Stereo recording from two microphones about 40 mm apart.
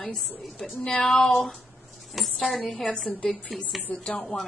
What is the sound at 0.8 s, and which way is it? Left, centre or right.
Speech, left.